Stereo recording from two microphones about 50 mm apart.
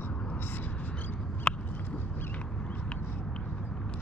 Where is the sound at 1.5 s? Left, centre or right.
Left.